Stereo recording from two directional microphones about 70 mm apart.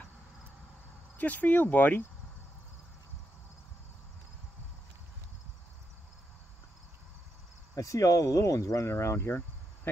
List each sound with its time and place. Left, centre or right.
1.1 s speech: left
7.7 s speech: left
8.8 s speech: left